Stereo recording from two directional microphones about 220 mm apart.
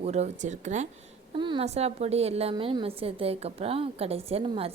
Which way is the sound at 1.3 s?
20° right (ahead or behind).